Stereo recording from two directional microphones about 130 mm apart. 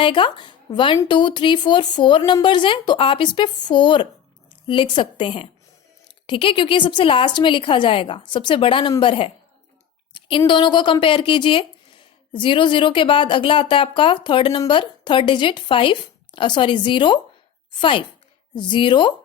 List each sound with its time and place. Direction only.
0.0 s a woman's voice: 40° left (ahead or behind)